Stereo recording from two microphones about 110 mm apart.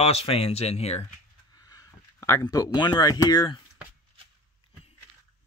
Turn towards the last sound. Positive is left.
turn(degrees=45)  # may be behind; listen again after turning